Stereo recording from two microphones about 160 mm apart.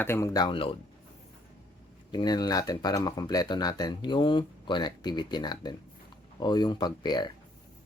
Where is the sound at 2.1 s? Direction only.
25° left (ahead or behind).